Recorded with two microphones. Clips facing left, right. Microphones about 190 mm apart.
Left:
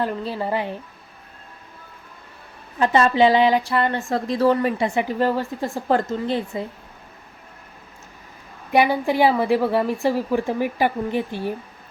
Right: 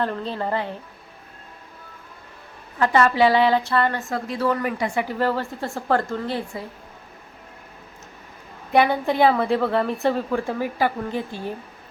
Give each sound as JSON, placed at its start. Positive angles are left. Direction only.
{"t": 0.0, "sound": "a woman's voice", "side_deg": 10}
{"t": 2.7, "sound": "speech", "side_deg": 20}
{"t": 4.1, "sound": "speech", "side_deg": 35}
{"t": 8.7, "sound": "a woman's voice", "side_deg": 10}